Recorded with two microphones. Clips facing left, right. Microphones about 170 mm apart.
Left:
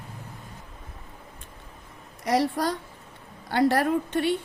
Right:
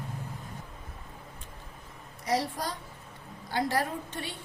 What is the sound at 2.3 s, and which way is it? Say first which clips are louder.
A woman's voice: left 6 dB; 65° left (ahead or behind).